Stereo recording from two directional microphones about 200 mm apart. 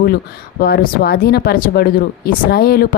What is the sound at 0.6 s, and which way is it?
Speech, 50° left (ahead or behind).